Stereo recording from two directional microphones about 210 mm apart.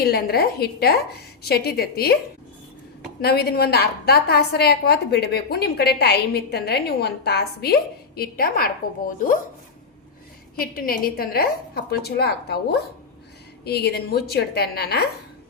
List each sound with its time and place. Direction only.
0.0 s a woman's voice: 50° left (ahead or behind)
3.2 s a woman's voice: 45° left (ahead or behind)
10.5 s a woman's voice: 45° left (ahead or behind)